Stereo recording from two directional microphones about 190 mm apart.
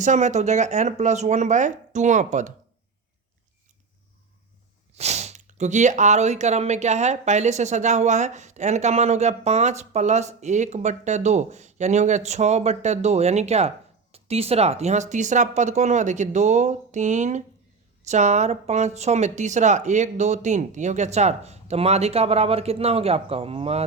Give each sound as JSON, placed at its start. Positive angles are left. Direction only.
{"t": 0.0, "sound": "speech", "side_deg": -40}
{"t": 4.9, "sound": "speech", "side_deg": -35}